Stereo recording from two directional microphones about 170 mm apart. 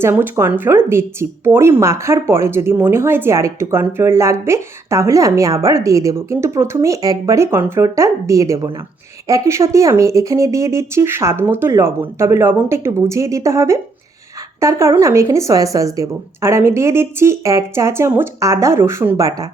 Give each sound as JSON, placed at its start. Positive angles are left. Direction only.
{"t": 0.0, "sound": "speech", "side_deg": -15}